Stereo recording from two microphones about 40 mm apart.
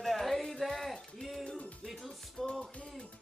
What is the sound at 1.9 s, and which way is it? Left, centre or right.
Music, centre.